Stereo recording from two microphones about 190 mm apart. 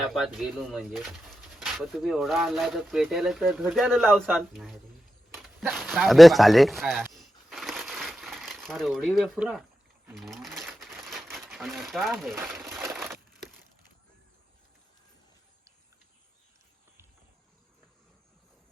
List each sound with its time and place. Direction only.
0.1 s speech: centre (ahead or behind)
7.1 s crushing: centre (ahead or behind)
10.1 s sewing machine: centre (ahead or behind)
12.7 s crushing: centre (ahead or behind)